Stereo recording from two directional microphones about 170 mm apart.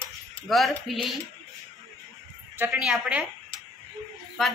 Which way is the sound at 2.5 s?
5° right (ahead or behind).